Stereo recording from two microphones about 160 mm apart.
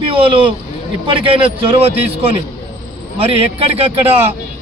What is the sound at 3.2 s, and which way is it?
A man's voice, 35° right (ahead or behind).